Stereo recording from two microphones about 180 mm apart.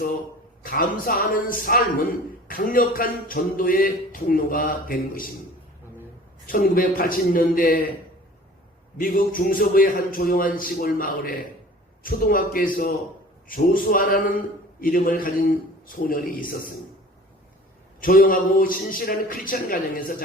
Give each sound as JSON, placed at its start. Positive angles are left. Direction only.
{"t": 0.6, "sound": "a man's voice", "side_deg": 50}
{"t": 6.5, "sound": "a man's voice", "side_deg": 50}
{"t": 9.0, "sound": "a man's voice", "side_deg": 50}
{"t": 18.0, "sound": "a man's voice", "side_deg": 50}